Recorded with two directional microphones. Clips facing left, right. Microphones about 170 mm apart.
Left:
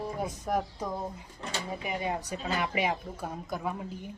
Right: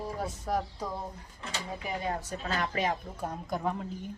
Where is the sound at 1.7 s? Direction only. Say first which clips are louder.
Left 1 dB; 10° left (ahead or behind).